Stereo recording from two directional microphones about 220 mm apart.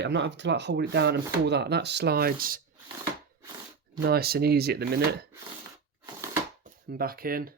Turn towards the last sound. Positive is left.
turn(degrees=-40)  # may be behind; listen again after turning